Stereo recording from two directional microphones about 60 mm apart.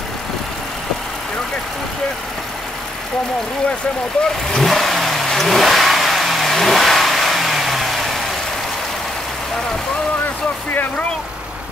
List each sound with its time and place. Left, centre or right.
4.5 s vehicle: centre